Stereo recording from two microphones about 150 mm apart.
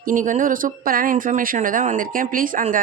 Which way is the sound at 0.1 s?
60° right (ahead or behind).